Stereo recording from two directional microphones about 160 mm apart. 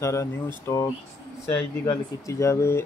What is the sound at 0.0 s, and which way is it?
Speech, 20° left (ahead or behind).